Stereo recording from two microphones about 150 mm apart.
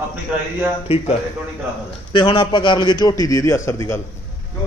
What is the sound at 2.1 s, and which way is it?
A man's voice, 35° left (ahead or behind).